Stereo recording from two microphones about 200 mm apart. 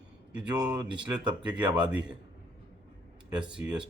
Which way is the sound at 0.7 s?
20° right (ahead or behind).